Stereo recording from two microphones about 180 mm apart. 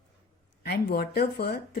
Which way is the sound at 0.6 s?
60° left (ahead or behind).